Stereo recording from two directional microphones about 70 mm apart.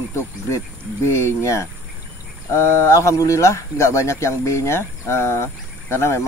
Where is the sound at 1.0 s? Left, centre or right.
Left.